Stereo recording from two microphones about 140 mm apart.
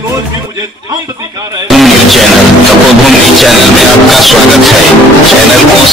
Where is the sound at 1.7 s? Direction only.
Centre (ahead or behind).